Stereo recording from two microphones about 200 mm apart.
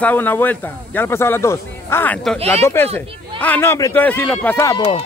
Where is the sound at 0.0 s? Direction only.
10° left (ahead or behind).